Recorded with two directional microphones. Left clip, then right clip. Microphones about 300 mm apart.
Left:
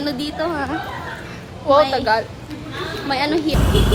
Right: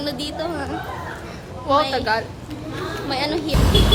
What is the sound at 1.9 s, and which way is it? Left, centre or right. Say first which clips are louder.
Speech: left 3 dB; centre.